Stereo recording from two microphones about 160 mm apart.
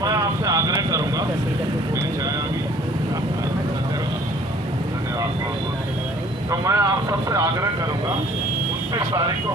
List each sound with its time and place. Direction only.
0.0 s vehicle: 20° right (ahead or behind)
6.5 s vehicle: 20° right (ahead or behind)